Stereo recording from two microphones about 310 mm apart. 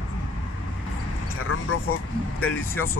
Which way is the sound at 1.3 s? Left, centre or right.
Left.